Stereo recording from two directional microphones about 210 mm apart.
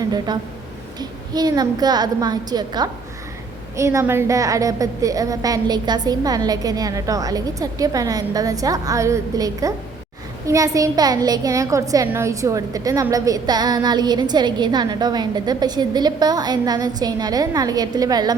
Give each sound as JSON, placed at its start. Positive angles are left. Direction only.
{"t": 0.3, "sound": "a woman's voice", "side_deg": -20}